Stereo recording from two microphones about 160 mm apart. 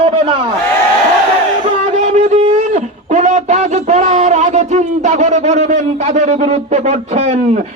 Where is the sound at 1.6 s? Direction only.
45° right (ahead or behind).